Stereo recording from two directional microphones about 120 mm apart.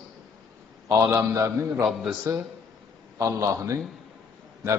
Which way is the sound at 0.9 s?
25° right (ahead or behind).